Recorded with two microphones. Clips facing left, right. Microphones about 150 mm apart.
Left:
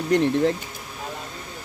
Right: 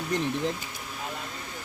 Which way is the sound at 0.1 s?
70° left (ahead or behind).